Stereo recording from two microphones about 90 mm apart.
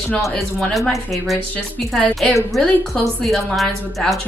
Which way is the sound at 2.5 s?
Centre (ahead or behind).